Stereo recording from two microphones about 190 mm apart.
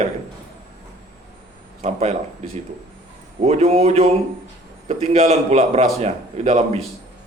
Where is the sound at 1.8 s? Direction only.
35° right (ahead or behind).